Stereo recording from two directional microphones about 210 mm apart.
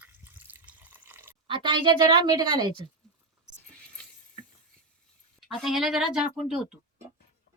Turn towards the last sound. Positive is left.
turn(degrees=0)  # may be behind; listen again after turning